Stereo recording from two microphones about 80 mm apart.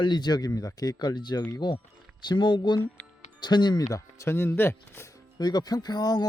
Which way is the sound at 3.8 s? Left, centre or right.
Left.